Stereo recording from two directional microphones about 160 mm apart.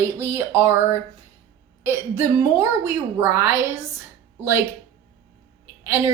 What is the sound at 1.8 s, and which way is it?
A woman's voice, 15° right (ahead or behind).